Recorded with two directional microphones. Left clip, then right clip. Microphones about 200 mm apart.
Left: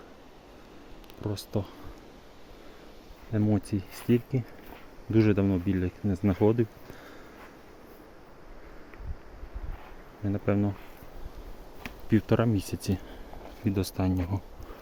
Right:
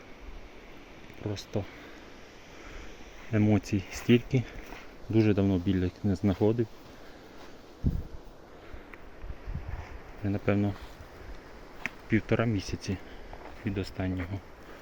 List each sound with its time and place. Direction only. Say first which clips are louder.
1.2 s speech: left 2 dB; 25° left (ahead or behind)
3.3 s speech: right 1 dB; centre (ahead or behind)
5.1 s speech: left 1 dB; 10° left (ahead or behind)
6.4 s speech: left 3 dB; 15° left (ahead or behind)
10.2 s speech: left 1 dB; 5° left (ahead or behind)
11.8 s speech: left 2 dB; 30° left (ahead or behind)
13.7 s speech: left 4 dB; 35° left (ahead or behind)